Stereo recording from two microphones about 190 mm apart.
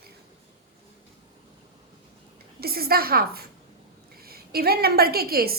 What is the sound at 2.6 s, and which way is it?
A woman's voice, 55° right (ahead or behind).